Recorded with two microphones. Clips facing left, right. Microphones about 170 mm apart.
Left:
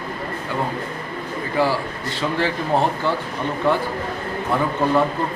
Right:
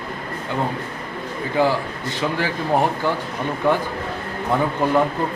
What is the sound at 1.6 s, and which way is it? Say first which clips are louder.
A man's voice: right 1 dB; 15° right (ahead or behind).